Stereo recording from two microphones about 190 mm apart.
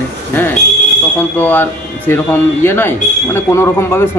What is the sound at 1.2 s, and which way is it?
Speech, 10° left (ahead or behind).